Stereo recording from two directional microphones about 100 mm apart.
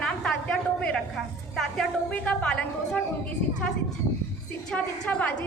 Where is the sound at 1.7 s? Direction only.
10° left (ahead or behind).